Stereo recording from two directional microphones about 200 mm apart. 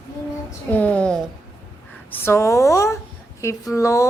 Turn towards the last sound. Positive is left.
turn(degrees=15)  # may be behind; listen again after turning